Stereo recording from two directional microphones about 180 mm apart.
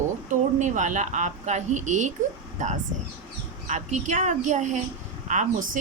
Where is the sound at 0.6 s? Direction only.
45° right (ahead or behind).